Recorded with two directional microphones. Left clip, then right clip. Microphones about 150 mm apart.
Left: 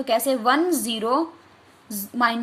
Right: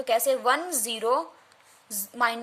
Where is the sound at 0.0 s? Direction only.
35° right (ahead or behind).